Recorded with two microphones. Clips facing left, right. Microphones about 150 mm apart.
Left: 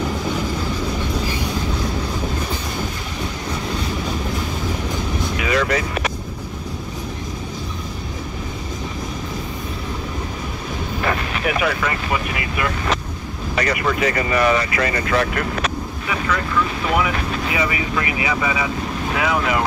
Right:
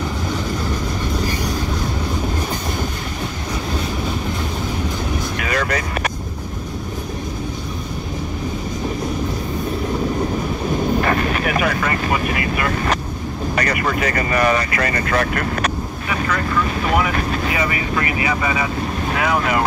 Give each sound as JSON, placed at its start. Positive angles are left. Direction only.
{"t": 5.4, "sound": "vehicle", "side_deg": -50}
{"t": 11.0, "sound": "vehicle", "side_deg": -50}
{"t": 13.6, "sound": "speech", "side_deg": -45}